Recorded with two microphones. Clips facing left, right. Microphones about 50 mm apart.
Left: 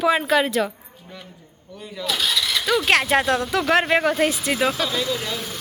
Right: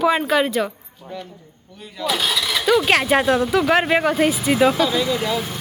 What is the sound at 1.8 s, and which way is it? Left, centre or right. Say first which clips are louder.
Speech: right 3 dB; centre.